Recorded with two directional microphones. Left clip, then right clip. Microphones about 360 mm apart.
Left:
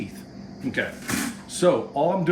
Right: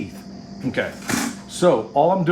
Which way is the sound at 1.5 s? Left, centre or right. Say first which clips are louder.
Right 4 dB; centre.